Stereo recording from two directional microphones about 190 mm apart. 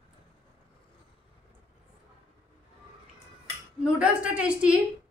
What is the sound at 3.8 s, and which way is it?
A woman's voice, 5° right (ahead or behind).